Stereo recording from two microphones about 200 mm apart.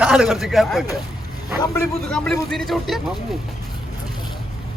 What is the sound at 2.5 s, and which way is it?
Speech, centre (ahead or behind).